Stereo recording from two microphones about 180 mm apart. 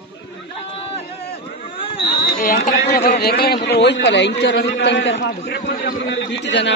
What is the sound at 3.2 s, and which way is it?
Speech, 60° left (ahead or behind).